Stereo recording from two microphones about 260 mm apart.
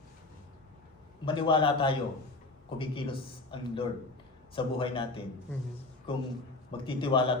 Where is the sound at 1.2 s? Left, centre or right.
Centre.